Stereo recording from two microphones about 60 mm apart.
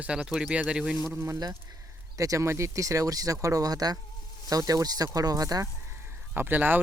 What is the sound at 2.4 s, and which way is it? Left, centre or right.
Speech, right.